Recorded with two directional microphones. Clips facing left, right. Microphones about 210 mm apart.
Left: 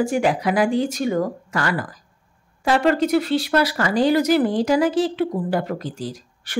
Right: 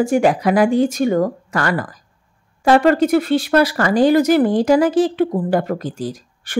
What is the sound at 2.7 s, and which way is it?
Speech, 50° right (ahead or behind).